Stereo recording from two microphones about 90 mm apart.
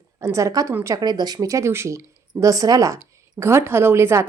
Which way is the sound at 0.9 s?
50° right (ahead or behind).